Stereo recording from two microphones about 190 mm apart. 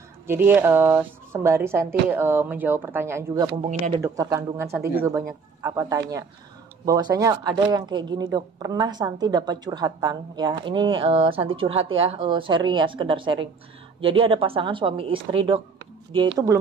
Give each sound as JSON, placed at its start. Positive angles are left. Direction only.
{"t": 0.3, "sound": "speech", "side_deg": -10}